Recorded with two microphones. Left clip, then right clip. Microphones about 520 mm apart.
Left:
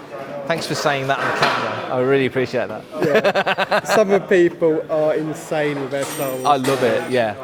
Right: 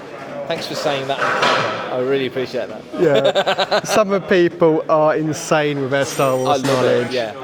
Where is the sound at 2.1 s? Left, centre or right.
Left.